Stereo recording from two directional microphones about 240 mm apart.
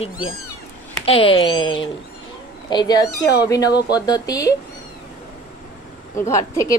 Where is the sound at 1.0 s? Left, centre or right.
Left.